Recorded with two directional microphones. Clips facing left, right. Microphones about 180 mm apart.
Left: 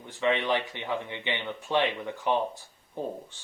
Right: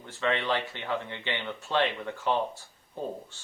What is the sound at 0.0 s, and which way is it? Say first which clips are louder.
Speech: left 2 dB; 15° left (ahead or behind).